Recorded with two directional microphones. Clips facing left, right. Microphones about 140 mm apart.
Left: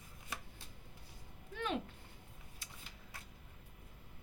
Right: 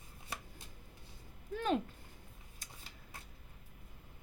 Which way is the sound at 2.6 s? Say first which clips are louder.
Right 2 dB; 45° right (ahead or behind).